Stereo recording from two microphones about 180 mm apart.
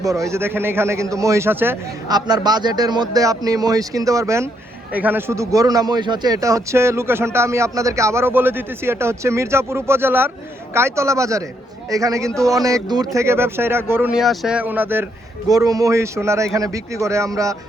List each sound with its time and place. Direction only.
0.0 s a man's voice: 15° right (ahead or behind)